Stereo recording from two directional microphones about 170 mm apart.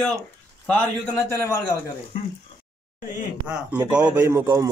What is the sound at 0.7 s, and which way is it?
Speech, 15° left (ahead or behind).